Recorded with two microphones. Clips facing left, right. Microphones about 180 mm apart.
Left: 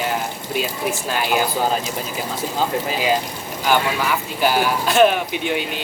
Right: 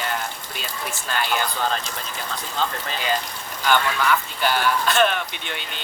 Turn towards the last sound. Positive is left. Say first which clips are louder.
# left 11 dB
turn(degrees=5)  # may be behind; listen again after turning